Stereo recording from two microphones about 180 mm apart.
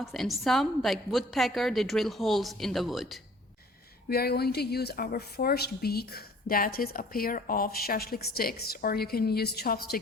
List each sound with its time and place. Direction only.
0.0 s a woman's voice: centre (ahead or behind)
4.1 s speech: 60° left (ahead or behind)